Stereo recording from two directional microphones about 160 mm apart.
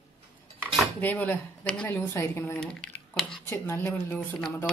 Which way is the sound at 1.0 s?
10° left (ahead or behind).